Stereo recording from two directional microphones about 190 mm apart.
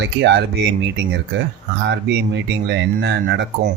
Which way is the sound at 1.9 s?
65° right (ahead or behind).